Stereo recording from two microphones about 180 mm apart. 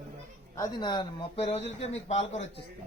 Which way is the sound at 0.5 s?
20° left (ahead or behind).